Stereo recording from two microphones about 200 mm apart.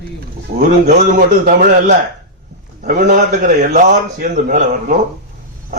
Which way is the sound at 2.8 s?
40° right (ahead or behind).